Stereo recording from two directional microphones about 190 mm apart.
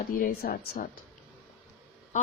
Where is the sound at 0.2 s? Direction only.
50° left (ahead or behind).